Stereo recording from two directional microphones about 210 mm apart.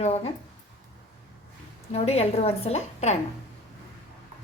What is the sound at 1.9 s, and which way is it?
A woman's voice, 30° left (ahead or behind).